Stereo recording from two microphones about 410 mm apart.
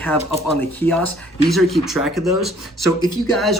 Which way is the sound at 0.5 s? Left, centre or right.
Centre.